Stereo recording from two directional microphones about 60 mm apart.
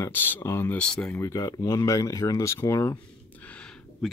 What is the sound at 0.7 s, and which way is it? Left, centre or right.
Speech, centre.